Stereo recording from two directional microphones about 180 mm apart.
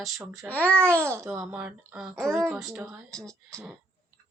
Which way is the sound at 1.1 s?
15° right (ahead or behind).